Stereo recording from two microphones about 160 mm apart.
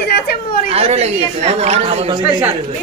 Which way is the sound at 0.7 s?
40° right (ahead or behind).